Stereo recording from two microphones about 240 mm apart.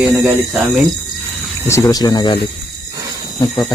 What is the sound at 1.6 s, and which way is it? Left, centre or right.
Speech, centre.